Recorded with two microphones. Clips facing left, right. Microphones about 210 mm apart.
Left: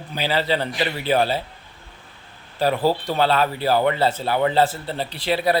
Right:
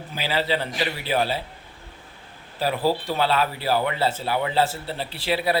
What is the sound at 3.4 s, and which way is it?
Speech, 5° right (ahead or behind).